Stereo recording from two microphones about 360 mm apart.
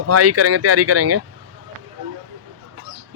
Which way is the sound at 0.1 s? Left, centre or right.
Right.